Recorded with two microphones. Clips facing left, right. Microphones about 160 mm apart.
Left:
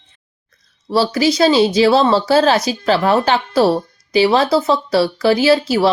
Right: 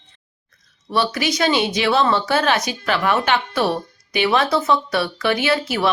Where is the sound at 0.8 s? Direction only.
30° left (ahead or behind).